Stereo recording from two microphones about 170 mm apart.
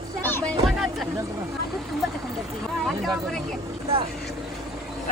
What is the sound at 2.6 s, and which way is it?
Speech, centre (ahead or behind).